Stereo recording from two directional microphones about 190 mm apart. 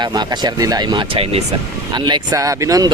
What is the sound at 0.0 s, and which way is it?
Speech, 20° right (ahead or behind).